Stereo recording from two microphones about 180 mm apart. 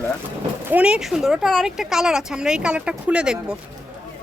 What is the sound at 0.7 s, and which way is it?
Speech, 5° right (ahead or behind).